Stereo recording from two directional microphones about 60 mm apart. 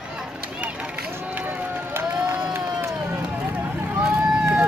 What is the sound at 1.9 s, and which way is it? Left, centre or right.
Crowd, right.